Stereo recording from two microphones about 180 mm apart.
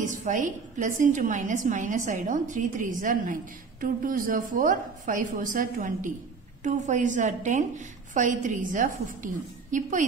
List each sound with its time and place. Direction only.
0.0 s a woman's voice: 45° right (ahead or behind)